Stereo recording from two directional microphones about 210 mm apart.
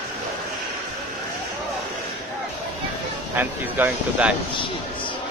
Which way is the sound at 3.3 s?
10° right (ahead or behind).